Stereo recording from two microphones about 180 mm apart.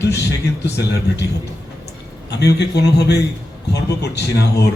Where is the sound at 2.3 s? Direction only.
70° left (ahead or behind).